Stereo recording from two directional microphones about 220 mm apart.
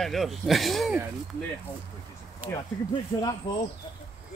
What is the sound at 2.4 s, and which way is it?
Speech, 15° left (ahead or behind).